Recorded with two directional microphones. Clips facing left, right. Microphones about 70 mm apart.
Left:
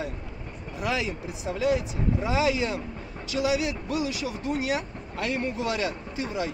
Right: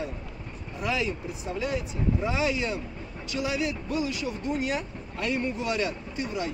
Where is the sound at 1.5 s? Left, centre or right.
Left.